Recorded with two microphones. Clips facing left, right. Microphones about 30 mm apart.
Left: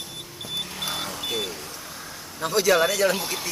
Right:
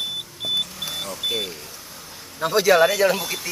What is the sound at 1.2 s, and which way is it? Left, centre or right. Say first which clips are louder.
Vehicle: right 3 dB; centre.